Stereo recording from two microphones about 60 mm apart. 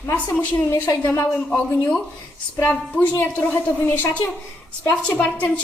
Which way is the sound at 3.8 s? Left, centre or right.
Left.